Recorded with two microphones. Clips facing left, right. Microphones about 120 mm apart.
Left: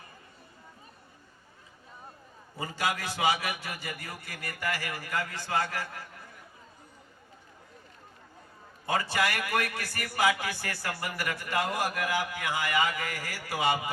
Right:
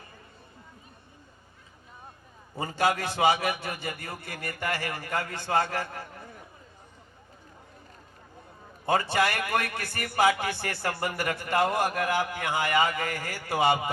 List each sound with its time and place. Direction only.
2.6 s speech: 30° right (ahead or behind)
5.9 s a sound: 30° right (ahead or behind)
9.0 s speech: 30° right (ahead or behind)